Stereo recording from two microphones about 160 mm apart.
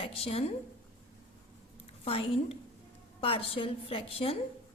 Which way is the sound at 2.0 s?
35° left (ahead or behind).